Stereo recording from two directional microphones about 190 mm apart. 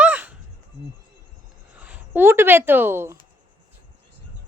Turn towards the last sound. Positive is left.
turn(degrees=-10)  # may be behind; listen again after turning